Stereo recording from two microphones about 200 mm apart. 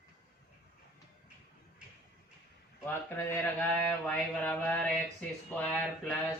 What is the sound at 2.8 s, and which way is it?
Speech, 10° left (ahead or behind).